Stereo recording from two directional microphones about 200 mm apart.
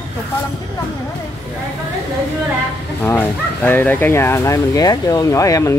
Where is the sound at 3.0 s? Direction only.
10° left (ahead or behind).